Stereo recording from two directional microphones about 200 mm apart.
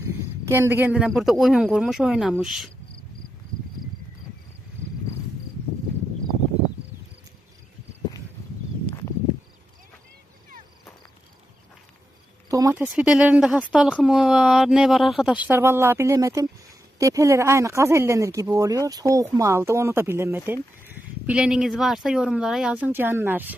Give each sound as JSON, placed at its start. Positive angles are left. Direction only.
{"t": 0.0, "sound": "speech", "side_deg": -15}
{"t": 12.5, "sound": "a sound", "side_deg": -15}
{"t": 12.8, "sound": "speech", "side_deg": -5}